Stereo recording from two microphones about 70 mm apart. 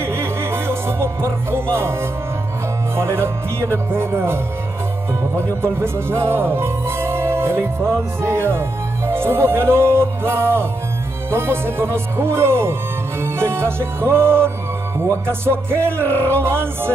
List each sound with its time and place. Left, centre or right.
0.0 s music: right
3.0 s speech: right
16.0 s music: left
16.3 s speech: right